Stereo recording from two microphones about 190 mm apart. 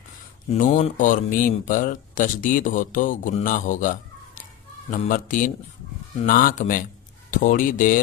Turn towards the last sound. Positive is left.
turn(degrees=45)  # may be behind; listen again after turning